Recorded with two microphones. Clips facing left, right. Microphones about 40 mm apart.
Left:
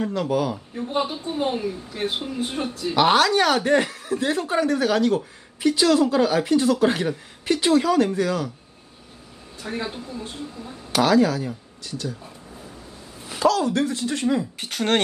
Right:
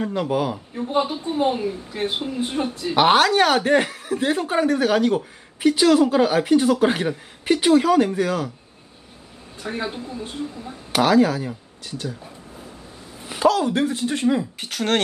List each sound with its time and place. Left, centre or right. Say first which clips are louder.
0.1 s speech: right 1 dB; right
0.5 s a woman's voice: right 3 dB; centre
3.1 s speech: right 2 dB; centre
6.1 s speech: right 2 dB; right
9.6 s speech: right 2 dB; centre
13.2 s speech: right 2 dB; centre
14.6 s a woman's voice: even; centre